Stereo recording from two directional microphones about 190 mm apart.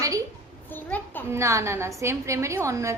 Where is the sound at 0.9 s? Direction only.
10° left (ahead or behind).